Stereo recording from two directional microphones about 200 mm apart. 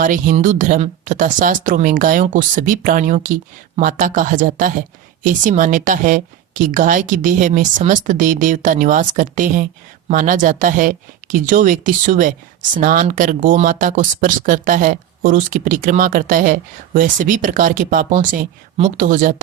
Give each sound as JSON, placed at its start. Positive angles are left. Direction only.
{"t": 0.0, "sound": "speech", "side_deg": -40}